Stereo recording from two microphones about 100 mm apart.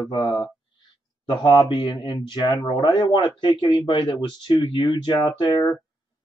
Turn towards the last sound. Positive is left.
turn(degrees=45)  # may be behind; listen again after turning